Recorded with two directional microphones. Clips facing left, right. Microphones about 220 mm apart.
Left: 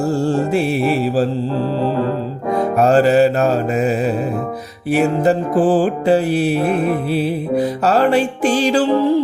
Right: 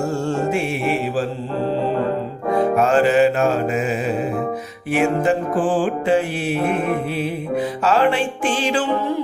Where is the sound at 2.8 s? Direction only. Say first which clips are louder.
Left 5 dB; 35° left (ahead or behind).